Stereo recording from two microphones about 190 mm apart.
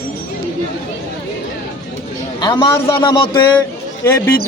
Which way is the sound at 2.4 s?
25° left (ahead or behind).